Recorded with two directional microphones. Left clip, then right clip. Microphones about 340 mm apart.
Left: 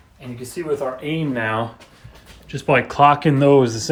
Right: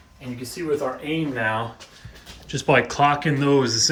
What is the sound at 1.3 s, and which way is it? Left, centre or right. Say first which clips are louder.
Speech: left 1 dB; left.